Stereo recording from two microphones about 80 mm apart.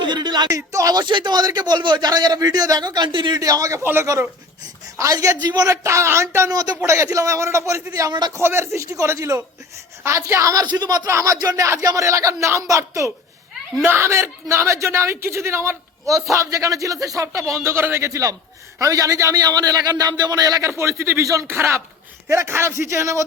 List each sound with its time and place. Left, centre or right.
0.0 s a man's voice: right
0.7 s a man's voice: right
1.0 s a man's voice: right
3.3 s a man's voice: right
5.1 s a man's voice: right
5.4 s a man's voice: right
5.6 s a man's voice: right
6.5 s a man's voice: right
6.8 s a man's voice: right
10.7 s a man's voice: right
13.8 s a man's voice: right
19.4 s a man's voice: right
20.7 s a man's voice: right